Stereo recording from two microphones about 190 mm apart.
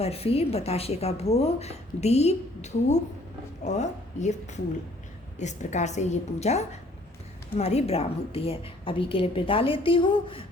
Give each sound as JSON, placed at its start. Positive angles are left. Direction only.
{"t": 0.0, "sound": "a woman's voice", "side_deg": 30}
{"t": 5.4, "sound": "a woman's voice", "side_deg": 40}